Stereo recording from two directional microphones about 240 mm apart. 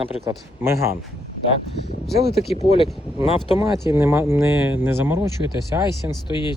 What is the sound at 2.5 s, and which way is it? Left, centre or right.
Speech, left.